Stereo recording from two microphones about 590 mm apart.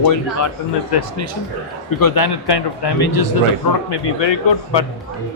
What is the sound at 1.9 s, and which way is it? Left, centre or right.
Speech, left.